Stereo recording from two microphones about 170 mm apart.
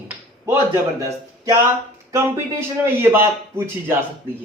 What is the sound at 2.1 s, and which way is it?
A man's voice, 15° right (ahead or behind).